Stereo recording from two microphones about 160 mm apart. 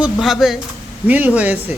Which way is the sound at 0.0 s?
Centre (ahead or behind).